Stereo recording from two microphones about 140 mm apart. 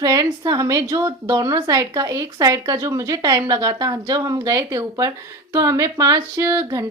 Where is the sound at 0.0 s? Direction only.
25° right (ahead or behind).